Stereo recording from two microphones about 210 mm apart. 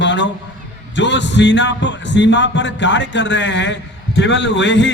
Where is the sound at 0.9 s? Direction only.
60° left (ahead or behind).